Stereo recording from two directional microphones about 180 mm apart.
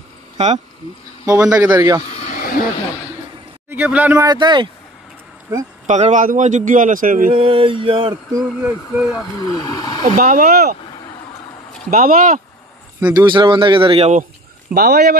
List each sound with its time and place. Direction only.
1.2 s a man's voice: 20° right (ahead or behind)
2.0 s a sound: 40° left (ahead or behind)
3.7 s speech: 10° right (ahead or behind)
4.3 s a man's voice: 25° right (ahead or behind)
5.9 s speech: 40° right (ahead or behind)
7.3 s a man's voice: 30° right (ahead or behind)
8.1 s speech: 15° right (ahead or behind)
8.9 s speech: centre (ahead or behind)
9.4 s speech: 20° left (ahead or behind)
10.0 s speech: 50° right (ahead or behind)
11.9 s speech: 50° right (ahead or behind)
13.1 s a man's voice: 25° right (ahead or behind)
14.7 s a man's voice: 60° right (ahead or behind)